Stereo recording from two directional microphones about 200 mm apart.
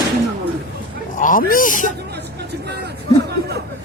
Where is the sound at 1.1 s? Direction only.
40° left (ahead or behind).